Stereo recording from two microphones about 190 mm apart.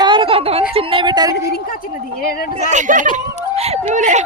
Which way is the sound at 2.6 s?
40° right (ahead or behind).